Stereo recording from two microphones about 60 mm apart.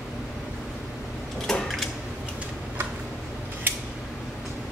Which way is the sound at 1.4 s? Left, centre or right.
Centre.